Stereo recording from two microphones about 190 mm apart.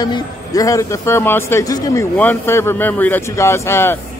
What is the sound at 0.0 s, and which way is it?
Speech, 20° left (ahead or behind).